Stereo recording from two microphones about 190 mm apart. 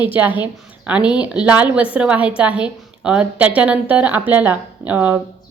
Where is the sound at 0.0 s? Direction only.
10° right (ahead or behind).